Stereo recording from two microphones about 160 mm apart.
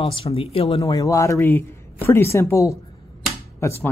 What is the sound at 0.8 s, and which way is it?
A woman's voice, 20° left (ahead or behind).